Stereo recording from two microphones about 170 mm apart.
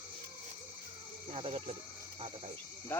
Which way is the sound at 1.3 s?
35° right (ahead or behind).